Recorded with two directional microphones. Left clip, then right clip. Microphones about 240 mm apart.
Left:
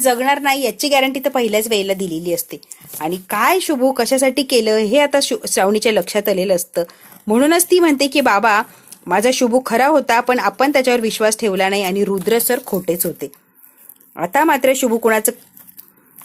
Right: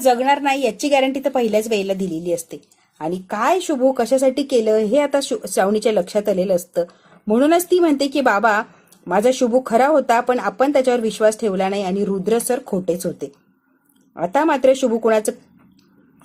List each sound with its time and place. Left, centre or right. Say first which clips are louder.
0.0 s a woman's voice: left 1 dB; centre
9.5 s speech: left 2 dB; left
9.7 s speech: left 1 dB; left
14.2 s speech: left 2 dB; centre